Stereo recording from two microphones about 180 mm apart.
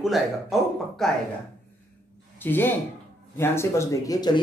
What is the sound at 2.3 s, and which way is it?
Speech, 10° left (ahead or behind).